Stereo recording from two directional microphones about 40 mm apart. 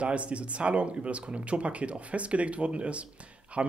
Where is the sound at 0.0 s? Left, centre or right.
Right.